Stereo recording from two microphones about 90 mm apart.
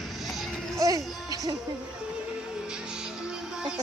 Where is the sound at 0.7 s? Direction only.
40° right (ahead or behind).